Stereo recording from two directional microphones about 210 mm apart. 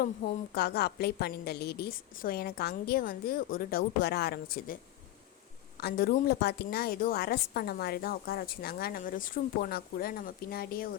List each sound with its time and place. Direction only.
0.0 s a woman's voice: 50° left (ahead or behind)